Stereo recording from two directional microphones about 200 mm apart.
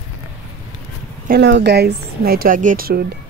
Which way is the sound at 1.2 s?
55° right (ahead or behind).